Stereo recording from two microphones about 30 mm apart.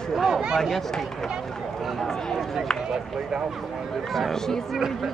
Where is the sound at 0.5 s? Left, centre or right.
Centre.